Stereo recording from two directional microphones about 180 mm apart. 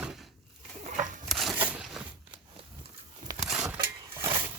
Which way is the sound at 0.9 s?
45° right (ahead or behind).